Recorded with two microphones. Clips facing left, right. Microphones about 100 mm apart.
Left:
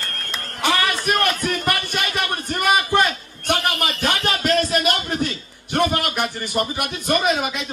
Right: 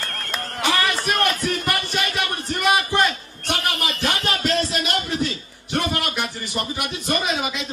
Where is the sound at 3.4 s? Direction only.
50° left (ahead or behind).